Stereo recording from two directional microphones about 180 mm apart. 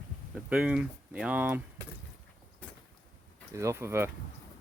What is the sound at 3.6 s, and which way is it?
Speech, 15° right (ahead or behind).